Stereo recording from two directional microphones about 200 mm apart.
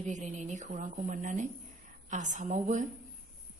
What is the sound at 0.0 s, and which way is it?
A woman's voice, 35° right (ahead or behind).